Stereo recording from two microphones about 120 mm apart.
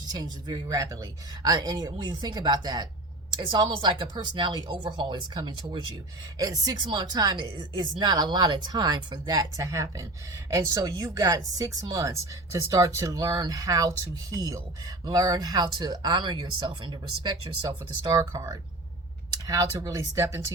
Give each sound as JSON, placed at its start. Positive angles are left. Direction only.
{"t": 0.1, "sound": "speech", "side_deg": -35}
{"t": 18.2, "sound": "speech", "side_deg": -30}